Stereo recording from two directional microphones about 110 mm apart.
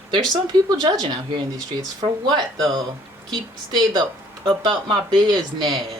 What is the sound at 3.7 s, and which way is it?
Speech, 45° right (ahead or behind).